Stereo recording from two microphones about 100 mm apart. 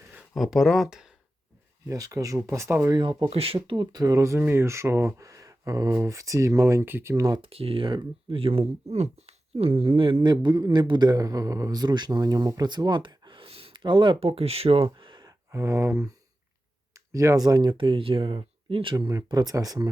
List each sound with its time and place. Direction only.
0.3 s speech: centre (ahead or behind)
1.9 s speech: 35° right (ahead or behind)
3.0 s speech: 55° right (ahead or behind)
3.2 s speech: 75° right (ahead or behind)
3.9 s speech: 30° right (ahead or behind)
7.3 s speech: 70° right (ahead or behind)
14.2 s speech: 85° right
14.8 s a sound: 55° right (ahead or behind)
15.5 s speech: 30° right (ahead or behind); by 18.9 s 60° right (ahead or behind)
18.9 s speech: 40° right (ahead or behind)